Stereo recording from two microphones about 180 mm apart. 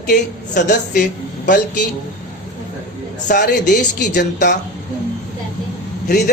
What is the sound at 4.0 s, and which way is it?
Speech, 65° left (ahead or behind).